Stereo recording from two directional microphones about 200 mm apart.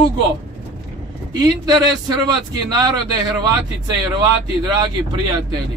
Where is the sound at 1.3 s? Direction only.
20° right (ahead or behind).